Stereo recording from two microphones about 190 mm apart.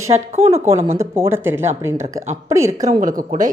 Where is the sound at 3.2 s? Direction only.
40° right (ahead or behind).